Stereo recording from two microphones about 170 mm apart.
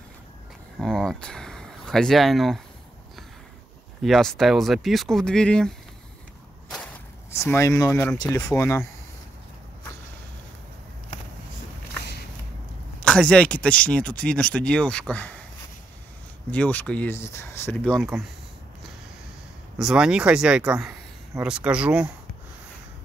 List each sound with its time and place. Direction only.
0.7 s speech: 5° left (ahead or behind)
4.0 s speech: centre (ahead or behind)
7.2 s speech: 15° left (ahead or behind)
13.0 s speech: 5° left (ahead or behind)
16.4 s speech: 10° left (ahead or behind)
18.1 s speech: 5° right (ahead or behind)
19.8 s speech: 5° right (ahead or behind)